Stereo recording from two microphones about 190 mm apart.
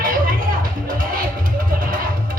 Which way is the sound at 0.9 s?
45° right (ahead or behind).